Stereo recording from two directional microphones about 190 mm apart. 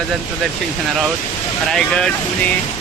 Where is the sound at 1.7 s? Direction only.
5° left (ahead or behind).